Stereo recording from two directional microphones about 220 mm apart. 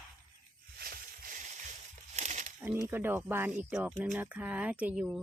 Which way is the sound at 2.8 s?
10° right (ahead or behind).